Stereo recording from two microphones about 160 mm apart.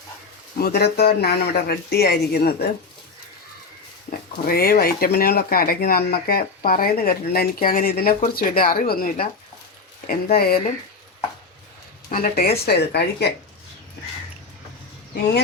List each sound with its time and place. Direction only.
0.6 s speech: 85° left
4.1 s speech: 70° left (ahead or behind)
12.0 s speech: 60° left (ahead or behind)
12.6 s speech: 90° left